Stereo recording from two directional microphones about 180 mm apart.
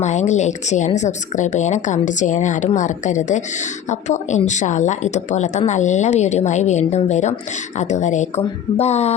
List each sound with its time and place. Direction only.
0.0 s a woman's voice: 40° left (ahead or behind)